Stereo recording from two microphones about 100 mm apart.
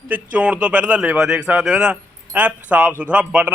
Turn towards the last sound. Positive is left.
turn(degrees=-10)  # may be behind; listen again after turning